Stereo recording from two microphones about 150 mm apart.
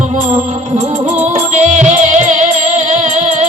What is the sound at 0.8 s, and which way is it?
Music, 50° right (ahead or behind).